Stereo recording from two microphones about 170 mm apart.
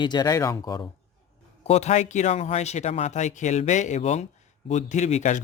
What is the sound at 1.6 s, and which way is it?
Speech, 40° left (ahead or behind).